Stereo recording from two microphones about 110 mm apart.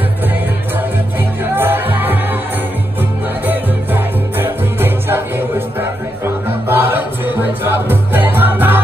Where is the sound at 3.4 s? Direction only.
20° right (ahead or behind).